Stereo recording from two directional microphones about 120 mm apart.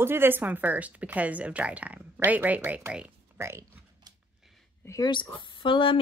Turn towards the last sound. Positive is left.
turn(degrees=45)  # may be behind; listen again after turning